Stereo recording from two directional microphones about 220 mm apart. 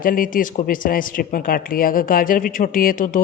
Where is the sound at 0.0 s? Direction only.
40° left (ahead or behind).